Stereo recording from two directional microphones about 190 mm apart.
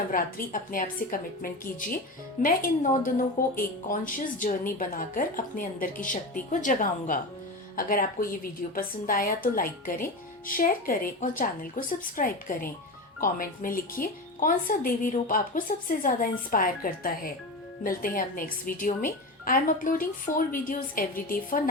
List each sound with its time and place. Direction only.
0.1 s a woman's voice: 45° left (ahead or behind)